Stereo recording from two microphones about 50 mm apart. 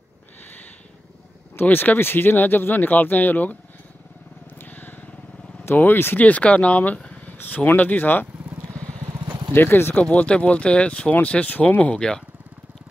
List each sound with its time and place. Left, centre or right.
1.6 s speech: left
4.6 s vehicle: left
5.8 s speech: left
6.1 s speech: left
7.0 s a sound: left
7.5 s speech: left
9.5 s speech: left
10.0 s speech: left